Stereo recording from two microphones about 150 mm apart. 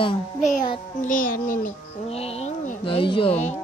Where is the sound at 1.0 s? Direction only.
60° left (ahead or behind).